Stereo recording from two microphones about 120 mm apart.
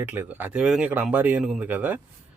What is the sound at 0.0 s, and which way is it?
Speech, 15° right (ahead or behind).